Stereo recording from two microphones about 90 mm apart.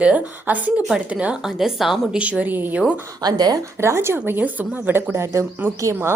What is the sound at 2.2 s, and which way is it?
Speech, 15° right (ahead or behind).